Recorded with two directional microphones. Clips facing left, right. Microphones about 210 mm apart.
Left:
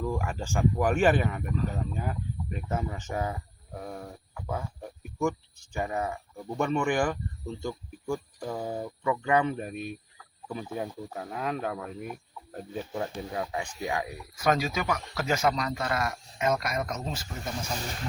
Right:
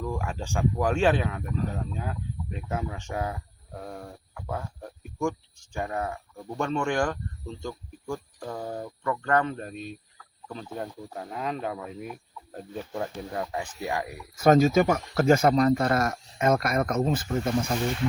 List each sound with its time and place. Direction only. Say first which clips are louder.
0.0 s speech: left 1 dB; 5° left (ahead or behind)
14.3 s speech: right 8 dB; 45° right (ahead or behind)